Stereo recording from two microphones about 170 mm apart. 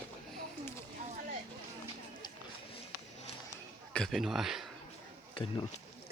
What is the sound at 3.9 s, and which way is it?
Speech, centre (ahead or behind).